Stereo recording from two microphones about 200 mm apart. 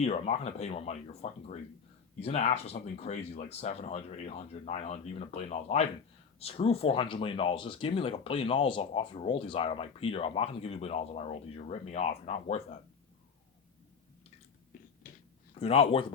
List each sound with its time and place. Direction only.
0.0 s speech: 30° left (ahead or behind)
15.5 s speech: 30° left (ahead or behind)